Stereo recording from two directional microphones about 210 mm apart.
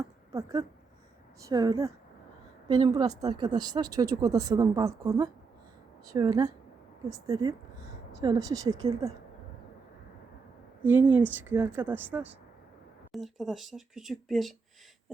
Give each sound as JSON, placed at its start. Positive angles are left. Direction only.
{"t": 0.3, "sound": "a woman's voice", "side_deg": -15}
{"t": 10.8, "sound": "a woman's voice", "side_deg": -10}